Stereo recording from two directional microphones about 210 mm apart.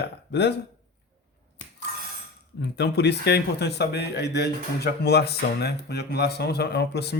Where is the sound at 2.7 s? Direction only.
55° left (ahead or behind).